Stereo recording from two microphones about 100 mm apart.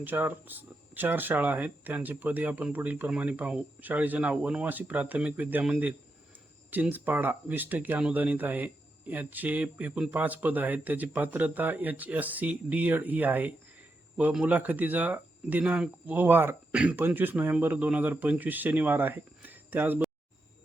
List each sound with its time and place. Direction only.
0.0 s speech: 20° right (ahead or behind)
6.9 s speech: 20° right (ahead or behind)